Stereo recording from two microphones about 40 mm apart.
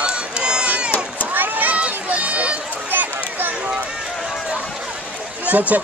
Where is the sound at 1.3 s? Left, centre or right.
Right.